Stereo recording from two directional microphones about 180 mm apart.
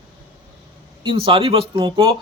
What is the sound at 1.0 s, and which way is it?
Speech, 30° right (ahead or behind).